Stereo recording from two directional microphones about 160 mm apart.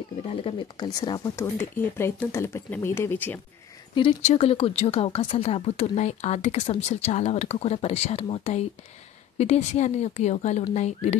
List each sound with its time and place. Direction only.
0.3 s speech: 35° left (ahead or behind); by 3.3 s 10° left (ahead or behind)
4.3 s speech: 40° left (ahead or behind)